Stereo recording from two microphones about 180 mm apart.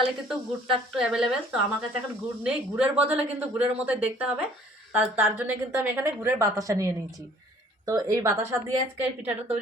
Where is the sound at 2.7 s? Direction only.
10° right (ahead or behind).